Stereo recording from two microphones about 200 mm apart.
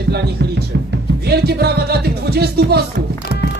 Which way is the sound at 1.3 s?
55° right (ahead or behind).